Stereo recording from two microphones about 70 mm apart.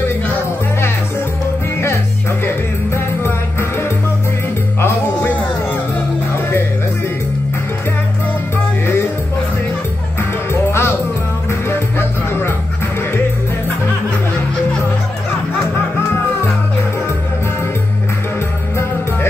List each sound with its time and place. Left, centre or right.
4.8 s music: left
10.5 s music: left